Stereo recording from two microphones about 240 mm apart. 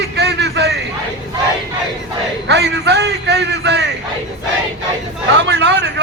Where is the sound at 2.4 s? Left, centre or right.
Right.